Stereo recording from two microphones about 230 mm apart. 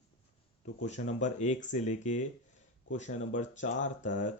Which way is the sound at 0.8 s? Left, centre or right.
Left.